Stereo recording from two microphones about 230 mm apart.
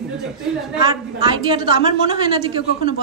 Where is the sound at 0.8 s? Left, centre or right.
Centre.